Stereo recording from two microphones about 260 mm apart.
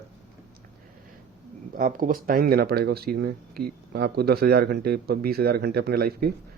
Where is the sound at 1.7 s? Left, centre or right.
Right.